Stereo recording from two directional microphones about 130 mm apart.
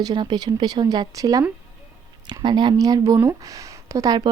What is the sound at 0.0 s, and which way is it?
Speech, 35° right (ahead or behind).